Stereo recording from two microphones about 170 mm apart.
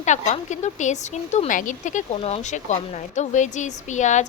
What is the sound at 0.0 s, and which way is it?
A woman's voice, 45° left (ahead or behind).